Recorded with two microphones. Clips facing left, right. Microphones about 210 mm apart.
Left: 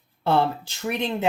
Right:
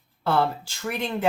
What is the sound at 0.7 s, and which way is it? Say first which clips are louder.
Speech: left 2 dB; 20° left (ahead or behind).